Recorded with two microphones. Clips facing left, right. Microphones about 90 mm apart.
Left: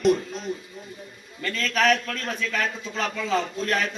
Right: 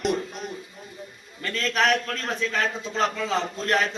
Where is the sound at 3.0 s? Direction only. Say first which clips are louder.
Right 1 dB; 25° right (ahead or behind).